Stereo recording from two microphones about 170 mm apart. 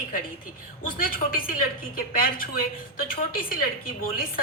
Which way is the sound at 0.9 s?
55° left (ahead or behind).